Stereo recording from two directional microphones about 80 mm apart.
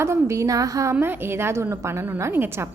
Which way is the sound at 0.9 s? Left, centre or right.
Right.